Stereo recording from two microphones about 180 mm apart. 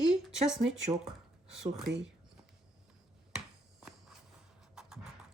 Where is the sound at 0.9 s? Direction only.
20° right (ahead or behind).